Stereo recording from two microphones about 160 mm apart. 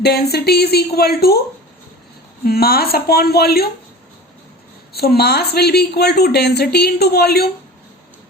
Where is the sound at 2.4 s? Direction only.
75° left (ahead or behind).